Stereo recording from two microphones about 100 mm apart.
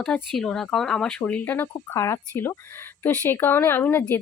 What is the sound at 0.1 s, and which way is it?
Speech, 5° left (ahead or behind).